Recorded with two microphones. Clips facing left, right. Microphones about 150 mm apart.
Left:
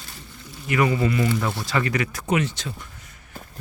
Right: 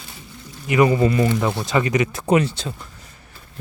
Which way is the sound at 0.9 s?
35° right (ahead or behind).